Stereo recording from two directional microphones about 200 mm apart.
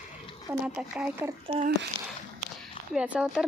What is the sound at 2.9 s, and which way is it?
Speech, 5° right (ahead or behind).